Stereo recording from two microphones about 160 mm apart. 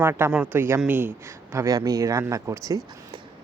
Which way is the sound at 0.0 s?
15° right (ahead or behind).